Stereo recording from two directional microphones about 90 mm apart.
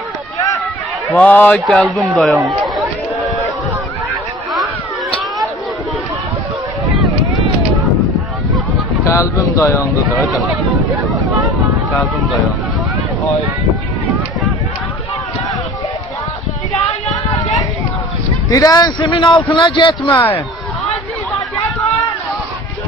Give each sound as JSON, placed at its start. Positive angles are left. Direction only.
{"t": 1.1, "sound": "a man's voice", "side_deg": 15}
{"t": 1.8, "sound": "speech", "side_deg": 0}
{"t": 9.0, "sound": "speech", "side_deg": 30}
{"t": 18.5, "sound": "a man's voice", "side_deg": 45}
{"t": 20.1, "sound": "speech", "side_deg": 25}